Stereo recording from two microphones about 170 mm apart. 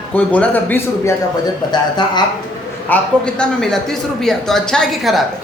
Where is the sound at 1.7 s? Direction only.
25° left (ahead or behind).